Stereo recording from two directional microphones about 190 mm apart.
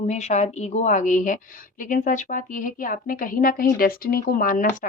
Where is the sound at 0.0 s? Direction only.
35° left (ahead or behind).